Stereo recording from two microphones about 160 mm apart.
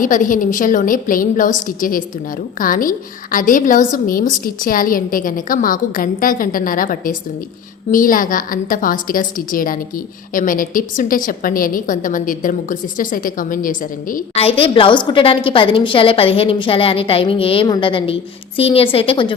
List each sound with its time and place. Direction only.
0.0 s a woman's voice: 55° left (ahead or behind)
14.3 s a woman's voice: 35° left (ahead or behind)